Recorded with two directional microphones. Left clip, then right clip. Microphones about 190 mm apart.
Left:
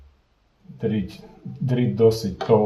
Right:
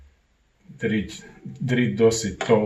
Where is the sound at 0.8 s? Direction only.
15° left (ahead or behind).